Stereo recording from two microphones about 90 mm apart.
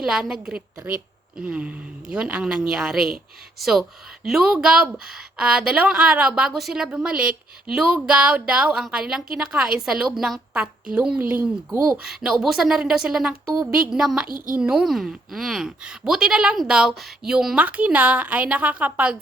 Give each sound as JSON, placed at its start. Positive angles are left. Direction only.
{"t": 0.0, "sound": "a woman's voice", "side_deg": -5}
{"t": 11.2, "sound": "speech", "side_deg": -20}
{"t": 11.7, "sound": "speech", "side_deg": -35}
{"t": 12.0, "sound": "a woman's voice", "side_deg": -5}
{"t": 17.3, "sound": "a woman's voice", "side_deg": -10}